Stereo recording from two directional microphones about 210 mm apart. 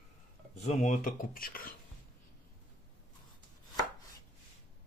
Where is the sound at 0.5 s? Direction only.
35° left (ahead or behind).